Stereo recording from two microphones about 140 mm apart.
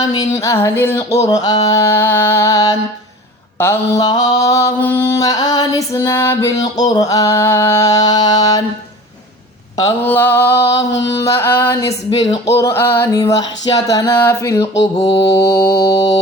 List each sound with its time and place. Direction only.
0.0 s mantra: 25° left (ahead or behind)
9.7 s mantra: 25° left (ahead or behind)
10.1 s a sound: 15° left (ahead or behind)
11.2 s mantra: 20° left (ahead or behind)
14.9 s mantra: 40° left (ahead or behind)
15.3 s mantra: 20° left (ahead or behind)